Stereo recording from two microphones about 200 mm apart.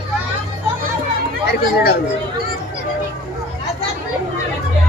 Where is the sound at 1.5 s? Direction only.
55° left (ahead or behind).